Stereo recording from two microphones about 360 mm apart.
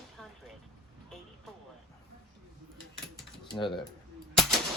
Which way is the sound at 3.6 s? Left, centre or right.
Centre.